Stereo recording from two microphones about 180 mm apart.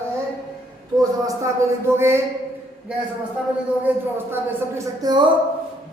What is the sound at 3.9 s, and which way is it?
A woman's voice, 10° right (ahead or behind).